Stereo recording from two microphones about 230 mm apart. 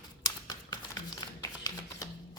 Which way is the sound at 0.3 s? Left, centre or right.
Centre.